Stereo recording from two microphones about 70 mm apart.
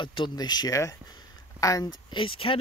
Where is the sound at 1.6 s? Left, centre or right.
Left.